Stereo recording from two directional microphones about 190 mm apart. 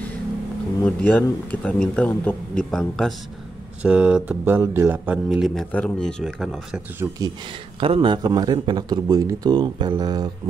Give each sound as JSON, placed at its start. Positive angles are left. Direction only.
{"t": 0.8, "sound": "speech", "side_deg": 10}
{"t": 7.8, "sound": "a man's voice", "side_deg": -25}